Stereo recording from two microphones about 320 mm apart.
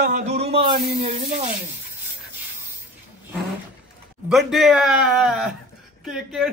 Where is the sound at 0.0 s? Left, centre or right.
Right.